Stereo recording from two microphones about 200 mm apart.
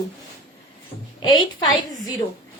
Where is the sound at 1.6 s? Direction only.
20° left (ahead or behind).